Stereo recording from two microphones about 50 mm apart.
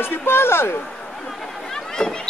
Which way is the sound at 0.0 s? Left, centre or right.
Left.